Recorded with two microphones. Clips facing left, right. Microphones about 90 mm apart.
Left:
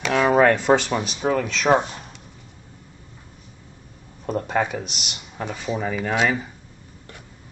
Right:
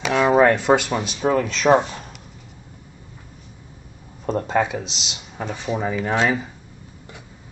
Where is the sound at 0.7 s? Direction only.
10° right (ahead or behind).